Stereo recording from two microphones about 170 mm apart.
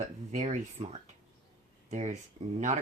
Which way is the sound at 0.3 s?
40° right (ahead or behind).